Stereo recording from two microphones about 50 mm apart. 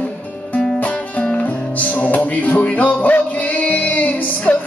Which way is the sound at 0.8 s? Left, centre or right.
Left.